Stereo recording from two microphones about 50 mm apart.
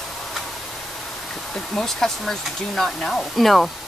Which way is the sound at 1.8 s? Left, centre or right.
Centre.